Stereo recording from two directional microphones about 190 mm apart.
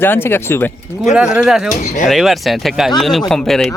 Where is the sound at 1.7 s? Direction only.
45° left (ahead or behind).